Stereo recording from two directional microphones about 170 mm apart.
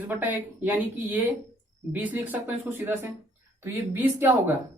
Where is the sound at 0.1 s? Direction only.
10° right (ahead or behind).